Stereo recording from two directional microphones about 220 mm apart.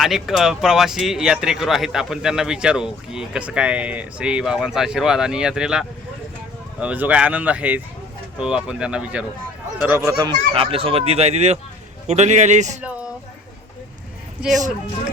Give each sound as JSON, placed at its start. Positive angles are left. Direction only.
{"t": 0.0, "sound": "a man's voice", "side_deg": 0}
{"t": 14.4, "sound": "speech", "side_deg": -5}